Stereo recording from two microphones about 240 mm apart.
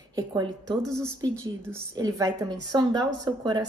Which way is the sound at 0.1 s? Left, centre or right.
Centre.